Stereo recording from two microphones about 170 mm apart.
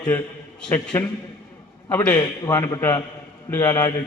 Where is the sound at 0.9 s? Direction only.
10° left (ahead or behind).